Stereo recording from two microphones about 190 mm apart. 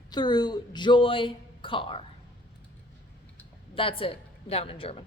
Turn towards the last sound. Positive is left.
turn(degrees=30)  # may be behind; listen again after turning